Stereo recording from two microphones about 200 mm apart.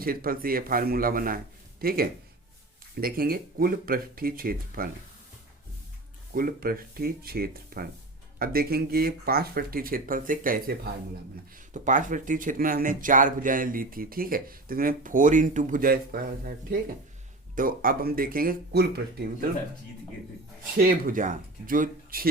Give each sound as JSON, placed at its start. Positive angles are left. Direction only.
{"t": 0.0, "sound": "speech", "side_deg": -45}
{"t": 6.3, "sound": "speech", "side_deg": -45}
{"t": 20.7, "sound": "speech", "side_deg": -45}